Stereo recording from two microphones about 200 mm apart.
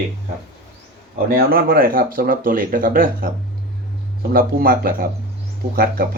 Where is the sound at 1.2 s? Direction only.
45° right (ahead or behind).